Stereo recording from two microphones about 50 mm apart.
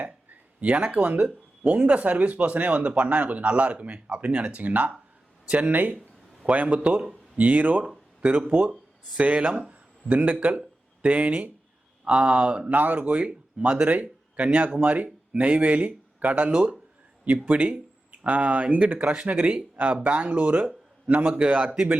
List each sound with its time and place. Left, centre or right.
0.6 s a man's voice: right
9.6 s a sound: right
11.0 s speech: right
16.5 s speech: centre